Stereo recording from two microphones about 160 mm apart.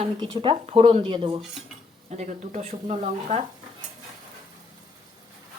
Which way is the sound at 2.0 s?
50° right (ahead or behind).